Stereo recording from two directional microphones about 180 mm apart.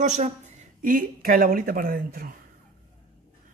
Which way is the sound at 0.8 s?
55° right (ahead or behind).